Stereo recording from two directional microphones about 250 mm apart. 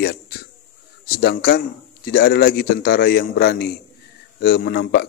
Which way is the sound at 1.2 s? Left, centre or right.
Left.